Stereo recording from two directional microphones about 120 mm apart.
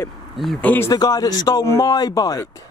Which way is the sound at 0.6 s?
15° left (ahead or behind).